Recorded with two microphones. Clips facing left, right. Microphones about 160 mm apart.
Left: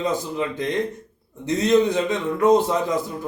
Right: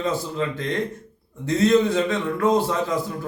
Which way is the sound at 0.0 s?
15° left (ahead or behind).